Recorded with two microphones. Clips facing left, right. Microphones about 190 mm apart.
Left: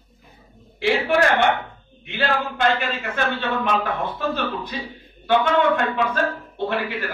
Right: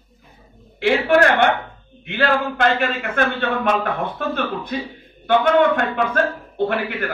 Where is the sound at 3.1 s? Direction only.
55° right (ahead or behind).